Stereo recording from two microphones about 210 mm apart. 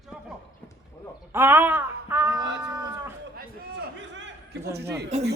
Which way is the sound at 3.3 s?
55° right (ahead or behind).